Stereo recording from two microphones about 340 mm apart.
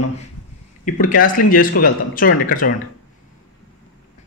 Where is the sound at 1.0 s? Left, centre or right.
Left.